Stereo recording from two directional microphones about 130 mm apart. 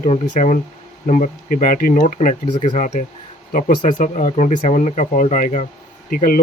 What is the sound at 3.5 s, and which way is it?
Speech, 80° left.